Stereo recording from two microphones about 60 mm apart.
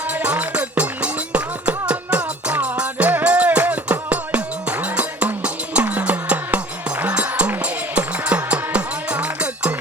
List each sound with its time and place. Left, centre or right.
0.1 s music: right